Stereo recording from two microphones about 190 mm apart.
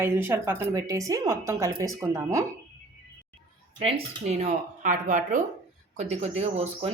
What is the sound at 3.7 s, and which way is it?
Speech, 30° right (ahead or behind).